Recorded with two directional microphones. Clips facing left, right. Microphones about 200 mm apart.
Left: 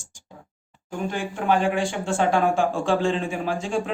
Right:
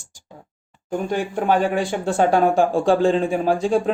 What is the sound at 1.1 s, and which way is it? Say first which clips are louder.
Speech: right 3 dB; 40° right (ahead or behind).